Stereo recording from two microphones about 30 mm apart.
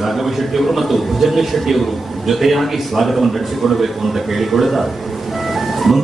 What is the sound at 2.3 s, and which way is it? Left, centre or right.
A man's voice, centre.